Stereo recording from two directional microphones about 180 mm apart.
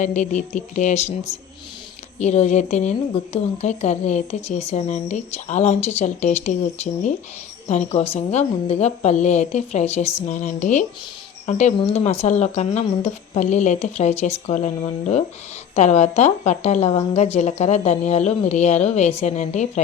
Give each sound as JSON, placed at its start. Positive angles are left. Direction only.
{"t": 0.0, "sound": "speech", "side_deg": 40}